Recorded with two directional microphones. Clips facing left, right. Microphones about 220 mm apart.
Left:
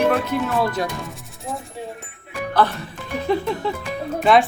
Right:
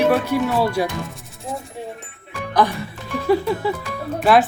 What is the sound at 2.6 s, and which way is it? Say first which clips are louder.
Speech: right 1 dB; 15° right (ahead or behind).